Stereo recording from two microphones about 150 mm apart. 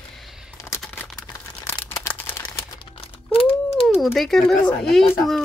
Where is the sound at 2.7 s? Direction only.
40° left (ahead or behind).